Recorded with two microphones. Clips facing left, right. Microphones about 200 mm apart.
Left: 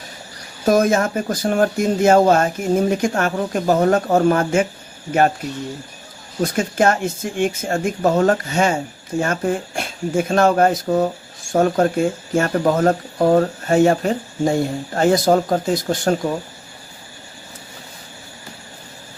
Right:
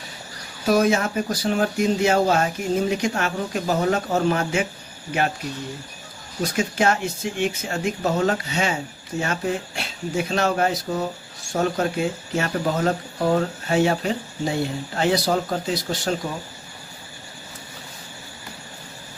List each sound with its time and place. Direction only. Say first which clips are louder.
0.6 s speech: left 3 dB; 45° left (ahead or behind)
6.4 s speech: left 4 dB; 50° left (ahead or behind)